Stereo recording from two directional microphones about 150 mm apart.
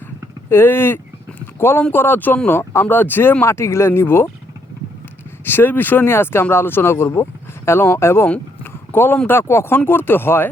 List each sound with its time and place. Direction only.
0.5 s speech: 15° left (ahead or behind)
5.5 s speech: 15° left (ahead or behind)